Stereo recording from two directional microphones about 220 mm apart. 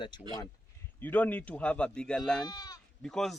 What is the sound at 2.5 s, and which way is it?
Speech, 15° left (ahead or behind).